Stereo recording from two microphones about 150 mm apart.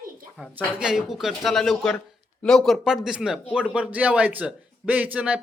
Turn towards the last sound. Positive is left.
turn(degrees=-10)  # may be behind; listen again after turning